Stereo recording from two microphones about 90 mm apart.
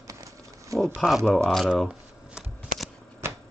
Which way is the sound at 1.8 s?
5° right (ahead or behind).